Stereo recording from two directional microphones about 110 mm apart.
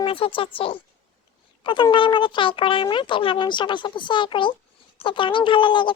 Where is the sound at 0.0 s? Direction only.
55° left (ahead or behind).